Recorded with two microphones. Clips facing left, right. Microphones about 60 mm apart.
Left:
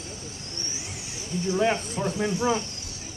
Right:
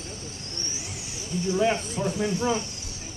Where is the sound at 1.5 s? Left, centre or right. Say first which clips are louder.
Even; left.